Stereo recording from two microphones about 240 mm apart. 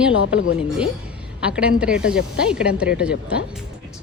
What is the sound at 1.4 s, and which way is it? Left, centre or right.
A woman's voice, centre.